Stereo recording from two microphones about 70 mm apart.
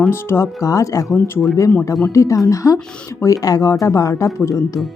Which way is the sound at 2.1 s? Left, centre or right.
Left.